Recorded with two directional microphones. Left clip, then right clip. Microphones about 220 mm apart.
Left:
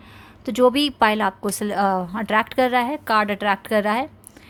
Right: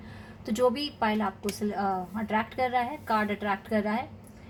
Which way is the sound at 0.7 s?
40° left (ahead or behind).